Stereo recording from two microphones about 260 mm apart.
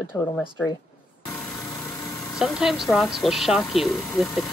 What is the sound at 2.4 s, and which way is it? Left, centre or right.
Speech, centre.